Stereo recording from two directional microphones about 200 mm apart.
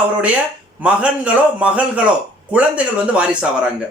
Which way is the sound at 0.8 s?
5° right (ahead or behind).